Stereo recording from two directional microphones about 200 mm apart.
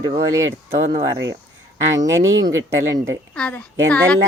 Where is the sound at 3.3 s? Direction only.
5° left (ahead or behind).